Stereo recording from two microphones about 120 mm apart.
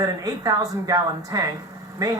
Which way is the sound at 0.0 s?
30° right (ahead or behind).